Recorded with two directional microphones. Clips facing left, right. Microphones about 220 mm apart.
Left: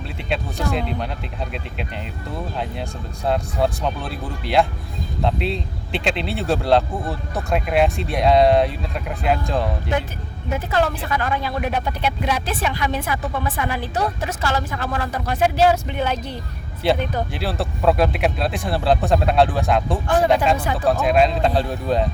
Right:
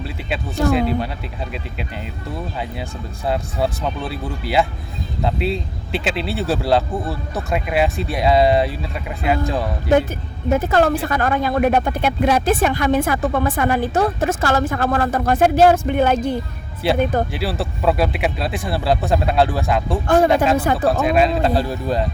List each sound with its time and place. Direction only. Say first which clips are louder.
0.3 s speech: right 5 dB; 5° right (ahead or behind)
3.2 s speech: left 1 dB; centre (ahead or behind)
10.5 s speech: right 5 dB; 45° right (ahead or behind)
17.3 s speech: right 1 dB; centre (ahead or behind)